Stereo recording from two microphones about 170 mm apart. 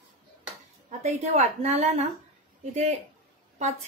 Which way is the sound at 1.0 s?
40° right (ahead or behind).